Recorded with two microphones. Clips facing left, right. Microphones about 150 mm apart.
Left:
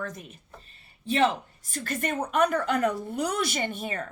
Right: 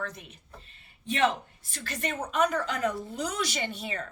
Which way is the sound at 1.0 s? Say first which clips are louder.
Left 2 dB; 35° left (ahead or behind).